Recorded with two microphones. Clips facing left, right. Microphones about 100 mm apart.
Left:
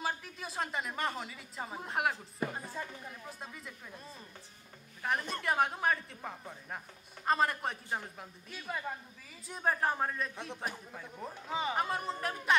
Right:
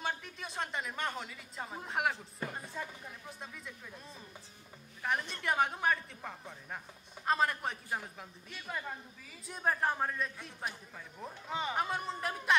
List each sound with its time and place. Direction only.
0.0 s speech: centre (ahead or behind)